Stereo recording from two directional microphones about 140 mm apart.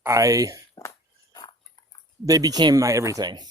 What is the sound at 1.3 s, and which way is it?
Dog, 30° left (ahead or behind).